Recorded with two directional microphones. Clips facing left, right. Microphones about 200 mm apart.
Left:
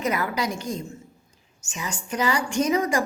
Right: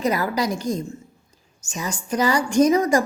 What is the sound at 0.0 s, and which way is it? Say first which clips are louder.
A woman's voice: right 4 dB; 35° right (ahead or behind).